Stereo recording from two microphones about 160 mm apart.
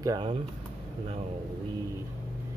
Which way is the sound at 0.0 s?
20° right (ahead or behind).